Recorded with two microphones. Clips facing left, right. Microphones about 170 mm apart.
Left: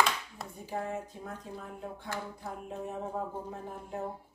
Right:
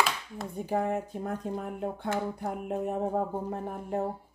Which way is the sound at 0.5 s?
60° right (ahead or behind).